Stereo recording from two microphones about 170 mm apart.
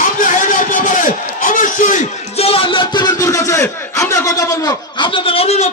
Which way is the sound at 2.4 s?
35° left (ahead or behind).